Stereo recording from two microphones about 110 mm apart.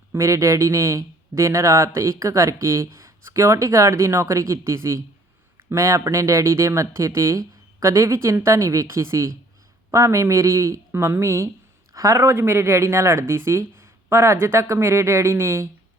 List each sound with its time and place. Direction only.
0.1 s speech: 25° right (ahead or behind)